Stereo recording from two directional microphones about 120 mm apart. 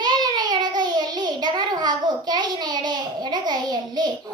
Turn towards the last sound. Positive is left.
turn(degrees=-35)  # may be behind; listen again after turning